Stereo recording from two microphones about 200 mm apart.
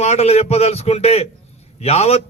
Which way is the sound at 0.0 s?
35° left (ahead or behind).